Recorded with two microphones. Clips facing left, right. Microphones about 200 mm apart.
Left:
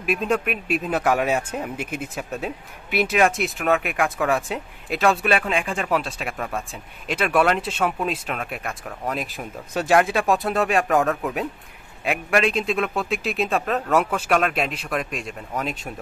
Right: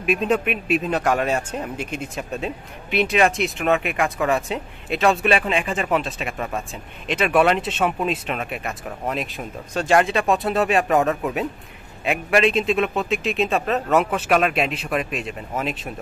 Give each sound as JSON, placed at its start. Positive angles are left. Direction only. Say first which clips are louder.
{"t": 0.0, "sound": "speech", "louder": "right 2 dB", "side_deg": 5}